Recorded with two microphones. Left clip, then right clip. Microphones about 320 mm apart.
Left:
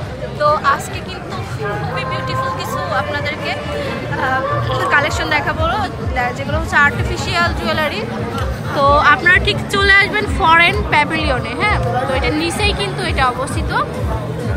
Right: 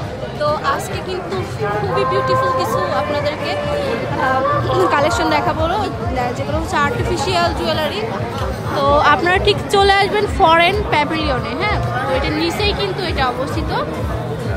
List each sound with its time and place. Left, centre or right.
0.4 s speech: centre
2.0 s speech: centre
6.8 s a woman's voice: centre